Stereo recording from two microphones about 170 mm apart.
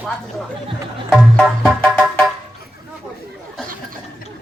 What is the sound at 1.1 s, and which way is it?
Music, 5° right (ahead or behind).